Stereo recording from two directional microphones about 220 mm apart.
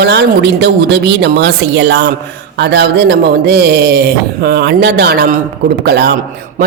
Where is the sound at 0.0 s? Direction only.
50° right (ahead or behind).